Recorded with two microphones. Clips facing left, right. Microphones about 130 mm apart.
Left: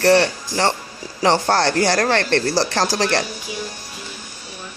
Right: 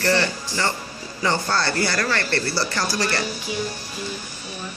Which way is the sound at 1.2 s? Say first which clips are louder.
Left 6 dB; 85° left.